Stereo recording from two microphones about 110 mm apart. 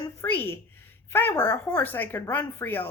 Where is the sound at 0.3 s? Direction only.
20° left (ahead or behind).